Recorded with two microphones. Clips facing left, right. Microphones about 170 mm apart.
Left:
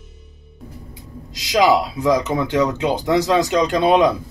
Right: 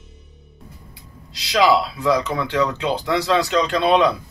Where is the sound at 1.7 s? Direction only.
15° left (ahead or behind).